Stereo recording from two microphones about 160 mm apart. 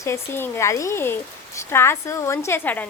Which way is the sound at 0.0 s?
15° left (ahead or behind).